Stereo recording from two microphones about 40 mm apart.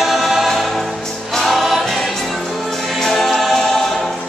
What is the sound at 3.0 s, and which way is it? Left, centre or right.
Choir, centre.